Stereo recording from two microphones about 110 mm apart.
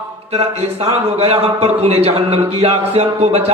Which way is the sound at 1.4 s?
70° right (ahead or behind).